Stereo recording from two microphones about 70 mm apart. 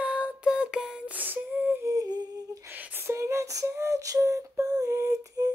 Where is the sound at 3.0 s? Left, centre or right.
Right.